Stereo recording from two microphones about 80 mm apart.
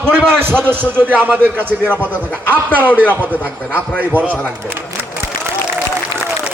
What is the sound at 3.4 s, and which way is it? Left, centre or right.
Speech, left.